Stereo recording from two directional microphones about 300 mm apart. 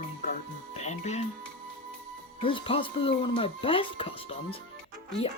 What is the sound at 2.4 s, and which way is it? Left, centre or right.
Speech, centre.